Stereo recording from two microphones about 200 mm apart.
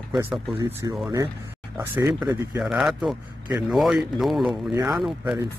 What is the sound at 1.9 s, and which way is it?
Speech, 10° right (ahead or behind).